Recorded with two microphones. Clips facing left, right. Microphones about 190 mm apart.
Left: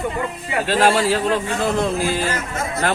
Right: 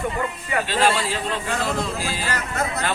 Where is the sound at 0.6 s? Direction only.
55° left (ahead or behind).